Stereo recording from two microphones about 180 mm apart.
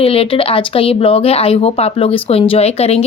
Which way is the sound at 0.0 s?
30° left (ahead or behind).